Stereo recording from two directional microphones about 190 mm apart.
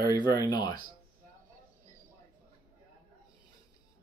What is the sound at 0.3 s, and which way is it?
Speech, 20° left (ahead or behind).